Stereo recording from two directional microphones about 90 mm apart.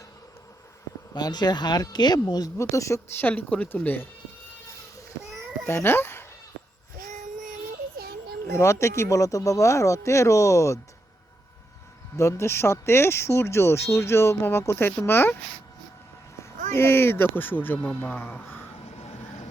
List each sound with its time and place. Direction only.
1.1 s speech: 50° left (ahead or behind)
2.2 s speech: 40° left (ahead or behind); by 4.1 s 20° left (ahead or behind)
5.6 s speech: 25° left (ahead or behind)
8.5 s speech: 35° left (ahead or behind)
12.1 s speech: 35° left (ahead or behind)
16.4 s speech: 25° left (ahead or behind)